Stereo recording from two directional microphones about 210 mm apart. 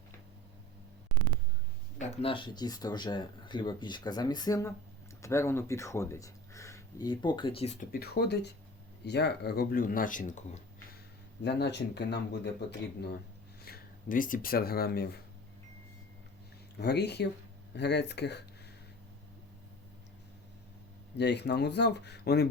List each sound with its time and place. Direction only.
2.0 s speech: 30° left (ahead or behind)
11.4 s speech: 55° left (ahead or behind)
13.6 s speech: 45° left (ahead or behind)
16.7 s speech: 50° left (ahead or behind)
21.2 s speech: 55° left (ahead or behind)